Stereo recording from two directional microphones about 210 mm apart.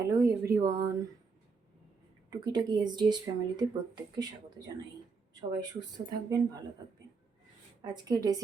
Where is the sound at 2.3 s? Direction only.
20° right (ahead or behind).